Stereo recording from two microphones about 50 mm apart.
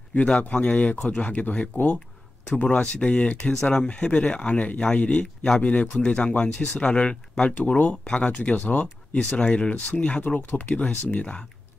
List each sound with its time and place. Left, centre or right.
0.1 s speech: left